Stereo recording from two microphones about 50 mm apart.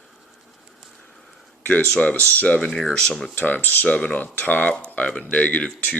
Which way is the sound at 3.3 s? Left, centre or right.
Left.